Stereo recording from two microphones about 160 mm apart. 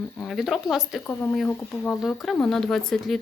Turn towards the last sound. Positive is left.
turn(degrees=0)  # may be behind; listen again after turning